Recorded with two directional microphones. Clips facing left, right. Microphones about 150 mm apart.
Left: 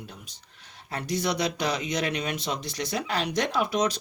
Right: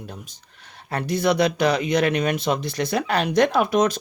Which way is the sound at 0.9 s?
60° right (ahead or behind).